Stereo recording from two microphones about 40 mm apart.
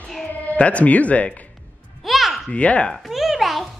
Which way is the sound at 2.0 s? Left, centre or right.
Centre.